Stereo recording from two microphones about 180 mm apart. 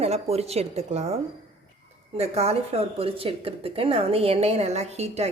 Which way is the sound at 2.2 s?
35° right (ahead or behind).